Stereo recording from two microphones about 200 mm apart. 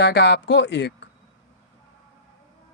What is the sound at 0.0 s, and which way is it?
Speech, 55° left (ahead or behind).